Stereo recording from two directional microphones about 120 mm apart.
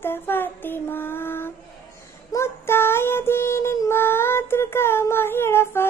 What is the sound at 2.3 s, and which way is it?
Child singing, 20° left (ahead or behind).